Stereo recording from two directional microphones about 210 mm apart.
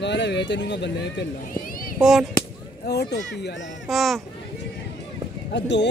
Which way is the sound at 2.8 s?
50° left (ahead or behind).